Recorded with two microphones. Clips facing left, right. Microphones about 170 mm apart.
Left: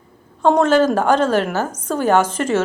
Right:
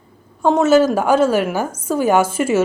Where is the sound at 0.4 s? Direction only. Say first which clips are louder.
Right 1 dB; 5° right (ahead or behind).